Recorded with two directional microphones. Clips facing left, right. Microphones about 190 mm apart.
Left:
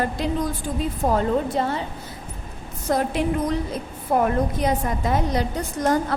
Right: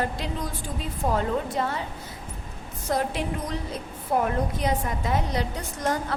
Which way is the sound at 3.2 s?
50° left (ahead or behind).